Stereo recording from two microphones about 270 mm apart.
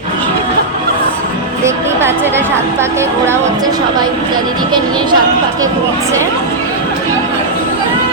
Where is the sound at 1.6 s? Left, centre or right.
Centre.